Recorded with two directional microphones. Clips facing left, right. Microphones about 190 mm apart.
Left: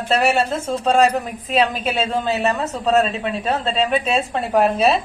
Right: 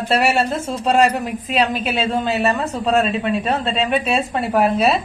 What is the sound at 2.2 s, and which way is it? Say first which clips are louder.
Speech: right 1 dB; 5° left (ahead or behind).